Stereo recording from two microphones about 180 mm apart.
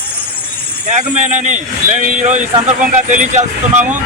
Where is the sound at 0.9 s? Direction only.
40° right (ahead or behind).